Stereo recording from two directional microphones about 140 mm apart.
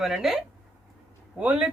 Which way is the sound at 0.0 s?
Centre (ahead or behind).